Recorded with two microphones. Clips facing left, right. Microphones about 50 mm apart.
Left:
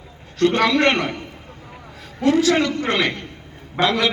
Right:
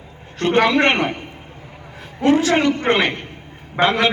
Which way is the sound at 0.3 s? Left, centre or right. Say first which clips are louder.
Right 1 dB; right.